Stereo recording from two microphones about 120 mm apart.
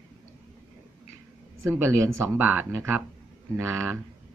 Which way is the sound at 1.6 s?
20° right (ahead or behind).